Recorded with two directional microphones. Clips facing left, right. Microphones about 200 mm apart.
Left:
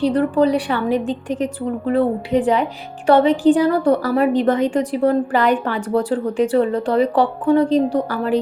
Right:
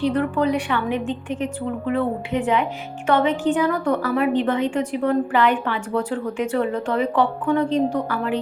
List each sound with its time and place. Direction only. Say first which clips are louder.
0.0 s a woman's voice: left 4 dB; 35° left (ahead or behind)